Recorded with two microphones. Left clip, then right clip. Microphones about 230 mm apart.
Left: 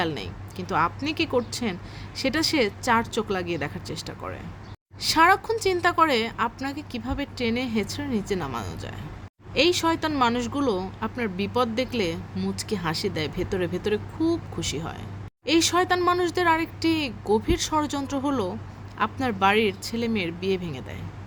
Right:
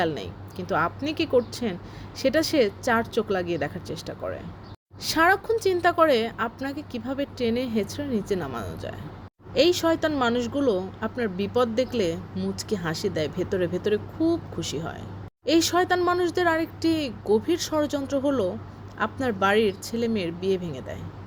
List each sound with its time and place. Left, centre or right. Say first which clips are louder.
0.0 s speech: right 2 dB; centre